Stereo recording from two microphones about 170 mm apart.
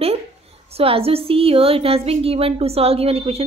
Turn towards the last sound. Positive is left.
turn(degrees=-35)  # may be behind; listen again after turning